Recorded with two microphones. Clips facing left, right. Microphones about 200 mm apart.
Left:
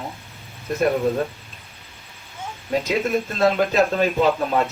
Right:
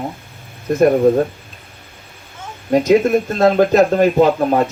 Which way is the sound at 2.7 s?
45° right (ahead or behind).